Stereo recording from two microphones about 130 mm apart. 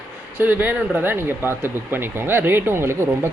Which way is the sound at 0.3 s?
15° right (ahead or behind).